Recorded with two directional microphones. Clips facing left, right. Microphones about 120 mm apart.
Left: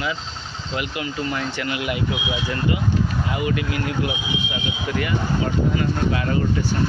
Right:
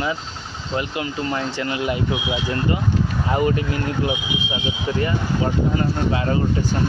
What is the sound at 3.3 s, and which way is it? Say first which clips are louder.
Speech: right 5 dB; 35° right (ahead or behind).